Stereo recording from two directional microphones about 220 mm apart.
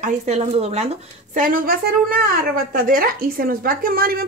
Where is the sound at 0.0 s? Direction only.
30° right (ahead or behind).